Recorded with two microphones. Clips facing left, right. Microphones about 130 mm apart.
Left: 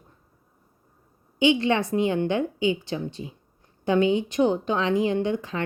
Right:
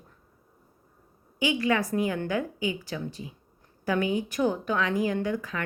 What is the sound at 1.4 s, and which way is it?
A woman's voice, 25° left (ahead or behind).